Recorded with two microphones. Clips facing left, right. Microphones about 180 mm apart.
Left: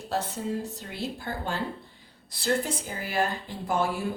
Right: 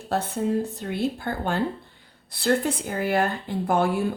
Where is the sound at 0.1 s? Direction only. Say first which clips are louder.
Right 6 dB; 60° right (ahead or behind).